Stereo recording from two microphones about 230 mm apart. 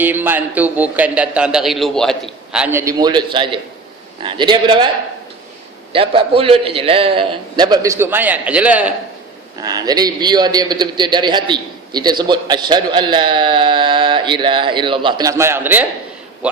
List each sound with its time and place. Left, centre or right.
0.0 s a man's voice: centre
5.9 s a man's voice: right; by 15.9 s centre